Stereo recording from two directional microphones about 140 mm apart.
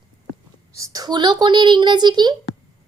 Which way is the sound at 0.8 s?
25° right (ahead or behind).